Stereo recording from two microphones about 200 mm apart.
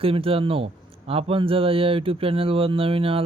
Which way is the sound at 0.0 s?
30° right (ahead or behind).